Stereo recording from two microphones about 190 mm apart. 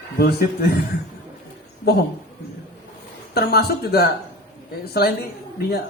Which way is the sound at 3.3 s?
55° left (ahead or behind).